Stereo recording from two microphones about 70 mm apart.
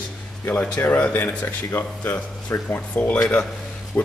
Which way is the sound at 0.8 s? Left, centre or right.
Left.